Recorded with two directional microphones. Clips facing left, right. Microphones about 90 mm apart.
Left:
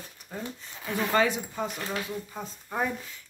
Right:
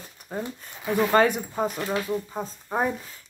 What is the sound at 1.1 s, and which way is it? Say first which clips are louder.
Speech: right 3 dB; 45° right (ahead or behind).